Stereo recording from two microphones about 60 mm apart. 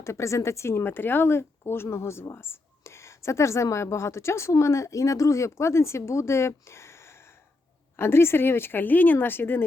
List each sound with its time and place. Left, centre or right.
0.0 s speech: left